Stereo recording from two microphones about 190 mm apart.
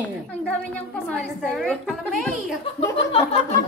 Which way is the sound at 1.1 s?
Centre (ahead or behind).